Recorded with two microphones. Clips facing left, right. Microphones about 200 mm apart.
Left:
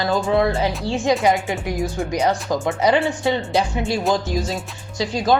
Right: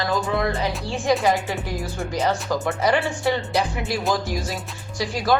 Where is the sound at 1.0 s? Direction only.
20° left (ahead or behind).